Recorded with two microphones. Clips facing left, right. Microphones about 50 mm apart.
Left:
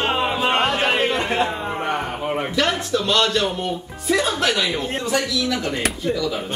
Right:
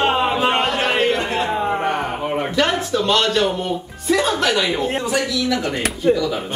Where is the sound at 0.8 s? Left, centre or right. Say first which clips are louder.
Right 2 dB; centre.